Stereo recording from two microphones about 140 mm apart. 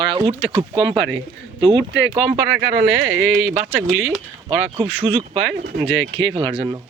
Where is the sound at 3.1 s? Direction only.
20° right (ahead or behind).